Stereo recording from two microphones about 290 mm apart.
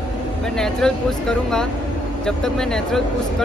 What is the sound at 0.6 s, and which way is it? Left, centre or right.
Speech, centre.